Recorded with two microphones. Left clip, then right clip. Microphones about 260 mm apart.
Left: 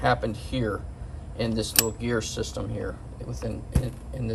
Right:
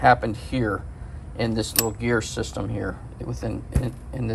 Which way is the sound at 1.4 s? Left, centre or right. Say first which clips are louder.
Right 1 dB; centre.